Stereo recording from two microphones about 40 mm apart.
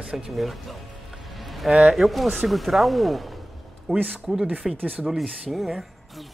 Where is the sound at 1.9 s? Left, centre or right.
Centre.